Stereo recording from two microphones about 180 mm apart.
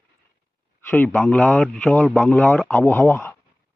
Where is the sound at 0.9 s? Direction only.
5° left (ahead or behind).